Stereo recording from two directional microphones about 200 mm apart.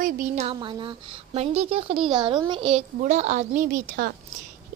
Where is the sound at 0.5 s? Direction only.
25° right (ahead or behind).